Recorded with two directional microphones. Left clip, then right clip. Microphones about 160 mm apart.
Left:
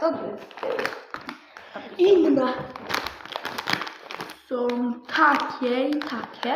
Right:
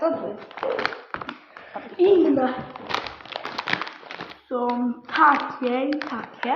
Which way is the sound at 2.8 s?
15° left (ahead or behind).